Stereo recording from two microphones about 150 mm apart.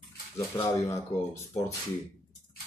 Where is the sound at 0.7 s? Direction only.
20° left (ahead or behind).